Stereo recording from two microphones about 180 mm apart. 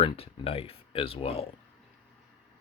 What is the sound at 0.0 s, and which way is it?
Speech, 30° left (ahead or behind).